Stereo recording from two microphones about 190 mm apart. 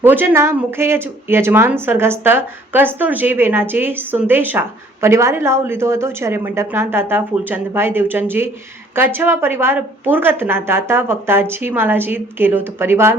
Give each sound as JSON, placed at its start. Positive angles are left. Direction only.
{"t": 0.0, "sound": "speech", "side_deg": -10}